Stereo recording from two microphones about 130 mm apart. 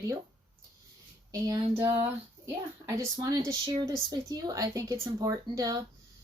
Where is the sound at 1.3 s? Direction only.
25° right (ahead or behind).